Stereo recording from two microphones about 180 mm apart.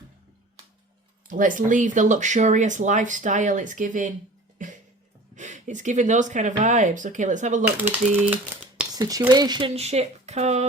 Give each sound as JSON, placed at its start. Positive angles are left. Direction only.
{"t": 1.3, "sound": "speech", "side_deg": -45}
{"t": 4.5, "sound": "a sound", "side_deg": -45}
{"t": 5.3, "sound": "speech", "side_deg": -40}
{"t": 7.6, "sound": "speech", "side_deg": -10}